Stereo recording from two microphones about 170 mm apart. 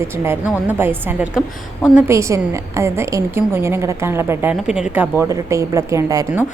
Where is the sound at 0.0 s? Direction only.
15° right (ahead or behind).